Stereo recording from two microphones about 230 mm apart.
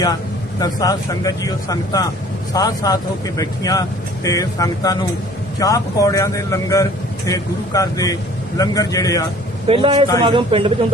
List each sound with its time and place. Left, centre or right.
0.6 s speech: centre
9.6 s a man's voice: right